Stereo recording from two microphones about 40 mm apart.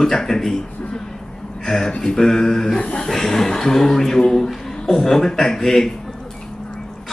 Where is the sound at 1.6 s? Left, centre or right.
Centre.